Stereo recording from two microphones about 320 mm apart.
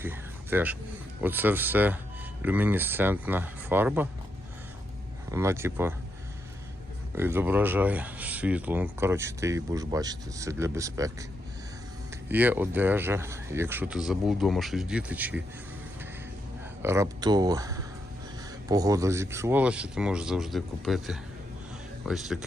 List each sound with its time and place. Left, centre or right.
0.0 s a sound: centre
1.2 s speech: centre
5.3 s speech: centre
7.2 s speech: centre
12.3 s speech: centre
16.8 s speech: centre